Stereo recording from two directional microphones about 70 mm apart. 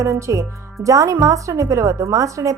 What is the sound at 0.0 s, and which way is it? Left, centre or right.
A woman's voice, right.